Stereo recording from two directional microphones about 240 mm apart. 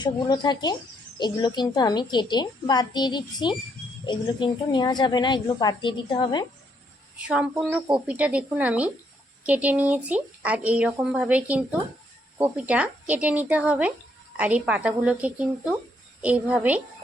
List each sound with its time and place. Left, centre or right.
0.0 s a woman's voice: centre
7.2 s a woman's voice: centre